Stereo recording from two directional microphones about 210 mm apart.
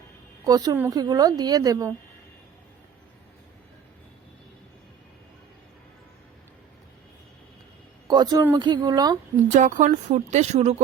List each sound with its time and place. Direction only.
0.4 s a woman's voice: 15° right (ahead or behind)
8.0 s speech: 20° right (ahead or behind)
9.5 s speech: 35° right (ahead or behind)